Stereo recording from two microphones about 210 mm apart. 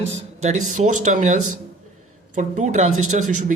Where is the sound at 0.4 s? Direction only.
35° right (ahead or behind).